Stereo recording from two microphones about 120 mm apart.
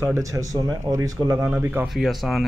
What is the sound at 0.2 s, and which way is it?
Speech, 30° right (ahead or behind).